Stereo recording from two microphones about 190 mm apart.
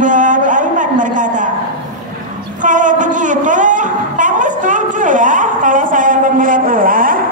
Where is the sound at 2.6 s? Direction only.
40° right (ahead or behind).